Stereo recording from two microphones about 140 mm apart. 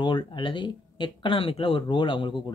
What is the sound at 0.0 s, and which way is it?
Speech, 35° left (ahead or behind).